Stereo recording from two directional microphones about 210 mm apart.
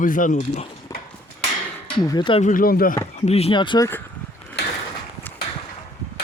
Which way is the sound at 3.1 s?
30° left (ahead or behind).